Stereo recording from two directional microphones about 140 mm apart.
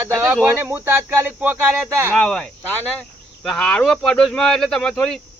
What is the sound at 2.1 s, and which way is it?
Speech, 5° left (ahead or behind).